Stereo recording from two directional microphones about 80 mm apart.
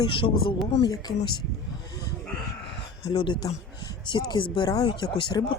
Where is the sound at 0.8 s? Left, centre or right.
Left.